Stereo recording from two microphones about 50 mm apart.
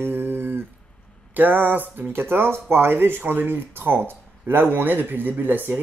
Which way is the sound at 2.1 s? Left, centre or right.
Right.